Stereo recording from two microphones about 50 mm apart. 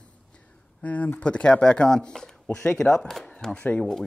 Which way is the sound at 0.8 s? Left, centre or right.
Left.